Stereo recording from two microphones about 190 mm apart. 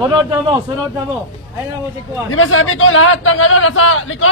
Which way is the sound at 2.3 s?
90° left.